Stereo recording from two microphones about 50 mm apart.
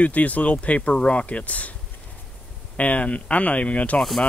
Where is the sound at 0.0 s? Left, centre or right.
Left.